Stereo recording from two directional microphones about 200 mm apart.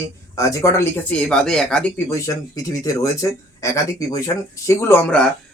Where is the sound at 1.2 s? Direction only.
5° left (ahead or behind).